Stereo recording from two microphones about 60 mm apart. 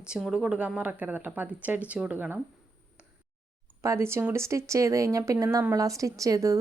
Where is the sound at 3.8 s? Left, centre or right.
Right.